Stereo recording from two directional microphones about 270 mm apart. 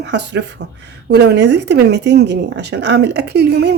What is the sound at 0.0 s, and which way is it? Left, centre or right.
Speech, right.